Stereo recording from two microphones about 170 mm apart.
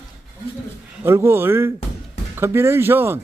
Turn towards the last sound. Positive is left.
turn(degrees=-15)  # may be behind; listen again after turning